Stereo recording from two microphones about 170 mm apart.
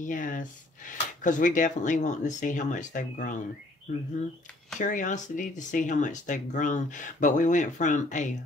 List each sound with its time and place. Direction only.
0.0 s speech: 50° left (ahead or behind)
4.7 s speech: 50° left (ahead or behind)